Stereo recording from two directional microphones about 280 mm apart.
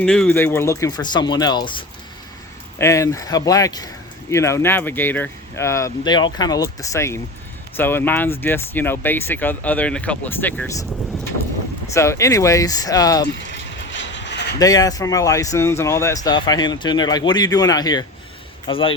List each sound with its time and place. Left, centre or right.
0.0 s speech: centre
11.9 s speech: centre
13.2 s vehicle: left
14.6 s speech: centre